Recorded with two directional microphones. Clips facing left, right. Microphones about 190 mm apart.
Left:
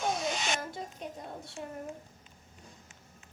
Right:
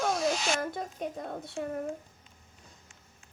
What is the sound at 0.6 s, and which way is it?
Speech, 60° right (ahead or behind).